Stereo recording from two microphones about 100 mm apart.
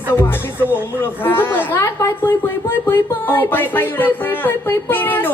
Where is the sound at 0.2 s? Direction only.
20° left (ahead or behind).